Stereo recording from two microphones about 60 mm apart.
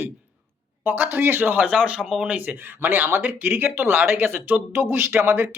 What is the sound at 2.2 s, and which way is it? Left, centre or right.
Speech, right.